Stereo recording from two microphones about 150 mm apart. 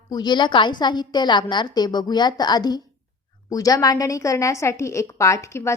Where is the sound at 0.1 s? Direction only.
30° left (ahead or behind).